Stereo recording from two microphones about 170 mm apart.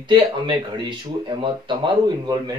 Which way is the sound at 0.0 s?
30° right (ahead or behind).